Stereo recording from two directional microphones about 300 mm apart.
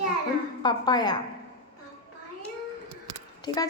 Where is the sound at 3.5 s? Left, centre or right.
Centre.